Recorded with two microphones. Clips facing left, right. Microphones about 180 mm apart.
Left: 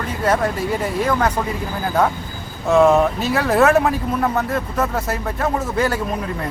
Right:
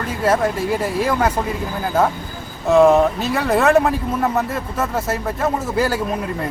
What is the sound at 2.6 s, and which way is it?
Speech, centre (ahead or behind).